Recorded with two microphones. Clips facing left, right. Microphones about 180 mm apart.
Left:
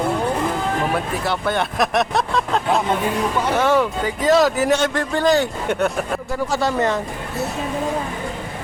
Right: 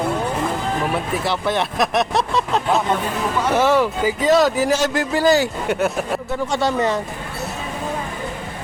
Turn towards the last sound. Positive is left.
turn(degrees=0)  # may be behind; listen again after turning